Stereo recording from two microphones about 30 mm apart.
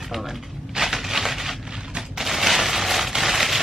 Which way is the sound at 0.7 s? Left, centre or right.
Centre.